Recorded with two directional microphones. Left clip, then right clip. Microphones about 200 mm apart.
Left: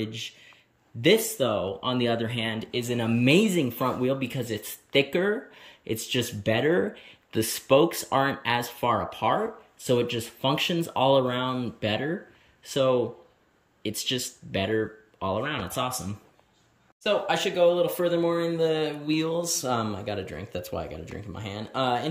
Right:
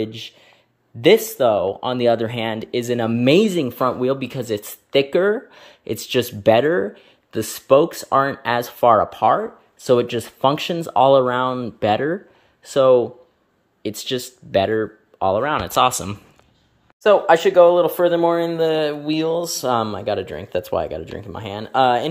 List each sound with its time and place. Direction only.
0.0 s speech: 10° right (ahead or behind)
15.5 s speech: 40° right (ahead or behind)
17.0 s speech: 20° right (ahead or behind)